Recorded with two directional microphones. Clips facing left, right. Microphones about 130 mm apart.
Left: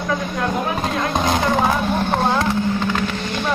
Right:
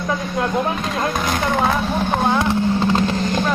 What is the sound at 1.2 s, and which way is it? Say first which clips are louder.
Speech: left 3 dB; 20° left (ahead or behind).